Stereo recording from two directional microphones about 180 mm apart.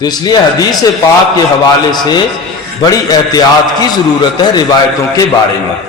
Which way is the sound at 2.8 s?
20° left (ahead or behind).